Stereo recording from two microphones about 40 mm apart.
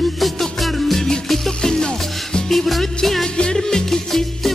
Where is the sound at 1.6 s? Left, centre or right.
Centre.